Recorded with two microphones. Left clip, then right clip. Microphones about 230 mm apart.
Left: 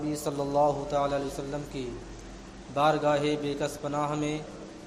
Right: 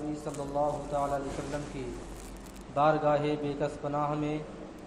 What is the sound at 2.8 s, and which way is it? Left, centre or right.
A man's voice, left.